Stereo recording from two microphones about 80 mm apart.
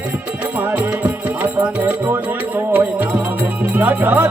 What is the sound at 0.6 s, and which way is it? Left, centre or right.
Music, right.